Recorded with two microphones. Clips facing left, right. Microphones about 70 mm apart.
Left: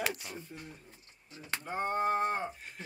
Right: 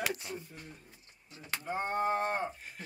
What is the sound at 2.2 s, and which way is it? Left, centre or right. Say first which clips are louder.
Speech: left 1 dB; right.